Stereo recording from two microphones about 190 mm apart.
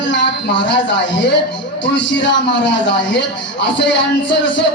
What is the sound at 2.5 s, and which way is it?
Speech, 70° left (ahead or behind).